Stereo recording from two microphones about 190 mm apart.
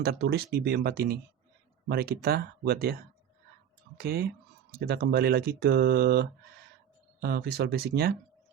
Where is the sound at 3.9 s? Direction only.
55° right (ahead or behind).